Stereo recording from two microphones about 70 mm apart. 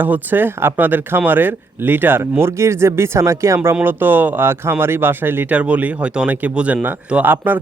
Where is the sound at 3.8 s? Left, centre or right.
Right.